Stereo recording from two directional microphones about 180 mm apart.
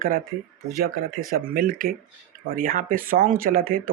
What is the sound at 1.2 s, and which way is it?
Speech, 50° right (ahead or behind).